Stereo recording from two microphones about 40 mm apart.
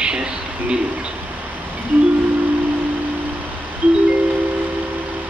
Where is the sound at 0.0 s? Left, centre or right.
Right.